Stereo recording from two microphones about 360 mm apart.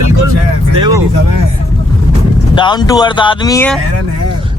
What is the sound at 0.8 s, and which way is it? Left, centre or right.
Speech, centre.